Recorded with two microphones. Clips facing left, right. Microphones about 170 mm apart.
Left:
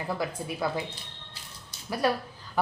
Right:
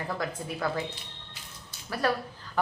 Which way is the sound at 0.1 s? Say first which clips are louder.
Left 4 dB; 10° left (ahead or behind).